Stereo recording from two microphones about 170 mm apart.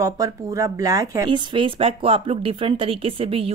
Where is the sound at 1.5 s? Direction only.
35° right (ahead or behind).